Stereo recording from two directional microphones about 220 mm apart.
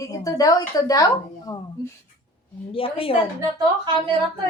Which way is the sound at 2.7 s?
25° left (ahead or behind).